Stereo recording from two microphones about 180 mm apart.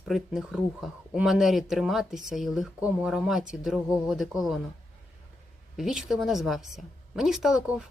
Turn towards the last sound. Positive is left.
turn(degrees=-5)  # may be behind; listen again after turning